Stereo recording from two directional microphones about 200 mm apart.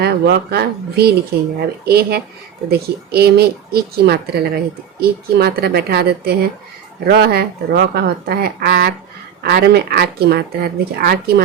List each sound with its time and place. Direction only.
0.0 s speech: 55° right (ahead or behind)